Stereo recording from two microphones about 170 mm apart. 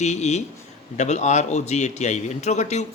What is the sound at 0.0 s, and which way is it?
Speech, 40° left (ahead or behind).